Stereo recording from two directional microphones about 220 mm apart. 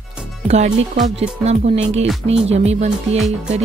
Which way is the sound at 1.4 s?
30° right (ahead or behind).